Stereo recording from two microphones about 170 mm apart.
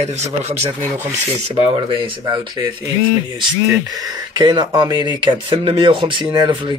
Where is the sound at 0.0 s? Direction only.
40° right (ahead or behind).